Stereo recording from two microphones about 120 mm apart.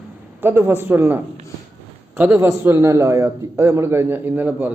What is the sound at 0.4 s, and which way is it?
A man's voice, 20° right (ahead or behind).